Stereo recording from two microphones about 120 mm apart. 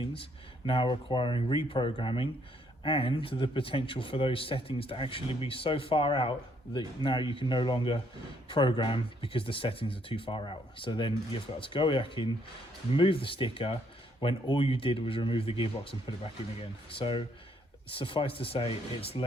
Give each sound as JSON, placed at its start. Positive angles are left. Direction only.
{"t": 0.0, "sound": "speech", "side_deg": 50}